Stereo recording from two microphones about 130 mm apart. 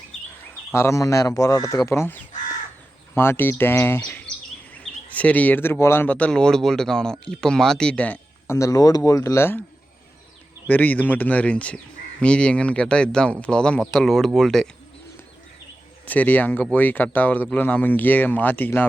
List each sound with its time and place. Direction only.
0.7 s speech: 20° left (ahead or behind)
3.2 s speech: 15° left (ahead or behind)
8.5 s speech: 25° left (ahead or behind)
10.7 s speech: 15° left (ahead or behind)
16.0 s speech: 10° left (ahead or behind)